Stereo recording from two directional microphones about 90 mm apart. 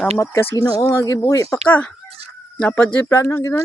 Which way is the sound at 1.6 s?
15° left (ahead or behind).